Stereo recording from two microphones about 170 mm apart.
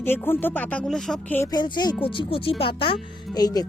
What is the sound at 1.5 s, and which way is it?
Speech, 25° left (ahead or behind).